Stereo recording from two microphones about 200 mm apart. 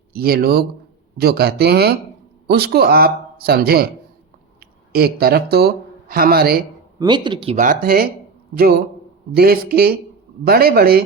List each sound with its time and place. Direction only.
0.1 s a man's voice: 50° right (ahead or behind)
7.0 s speech: 25° right (ahead or behind)
7.5 s a man's voice: 40° right (ahead or behind)